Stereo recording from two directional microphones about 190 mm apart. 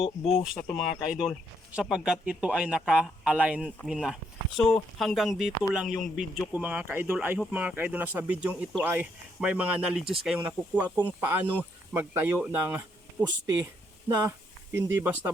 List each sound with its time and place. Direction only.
0.0 s speech: 30° left (ahead or behind)
0.4 s speech: centre (ahead or behind)
14.1 s speech: 15° right (ahead or behind)